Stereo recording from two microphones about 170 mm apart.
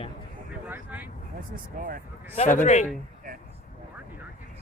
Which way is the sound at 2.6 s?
45° left (ahead or behind).